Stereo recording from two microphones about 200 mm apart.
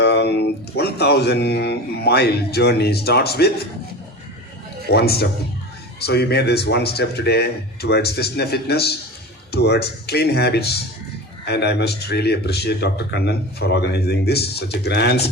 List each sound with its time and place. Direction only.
0.0 s speech: 55° left (ahead or behind)
4.9 s speech: 50° left (ahead or behind)